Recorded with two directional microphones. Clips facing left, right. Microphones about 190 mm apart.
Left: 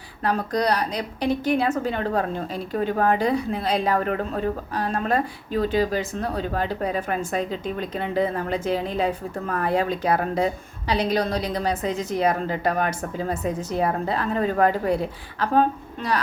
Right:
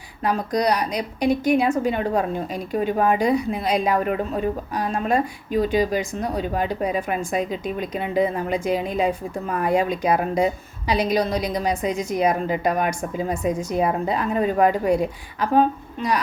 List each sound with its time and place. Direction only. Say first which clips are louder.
0.2 s a woman's voice: right 1 dB; 10° right (ahead or behind)